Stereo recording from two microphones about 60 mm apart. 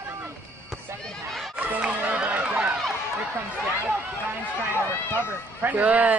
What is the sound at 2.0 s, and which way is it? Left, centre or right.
Run, right.